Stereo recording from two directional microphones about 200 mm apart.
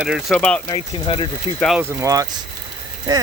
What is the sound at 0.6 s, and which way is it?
Speech, 25° left (ahead or behind).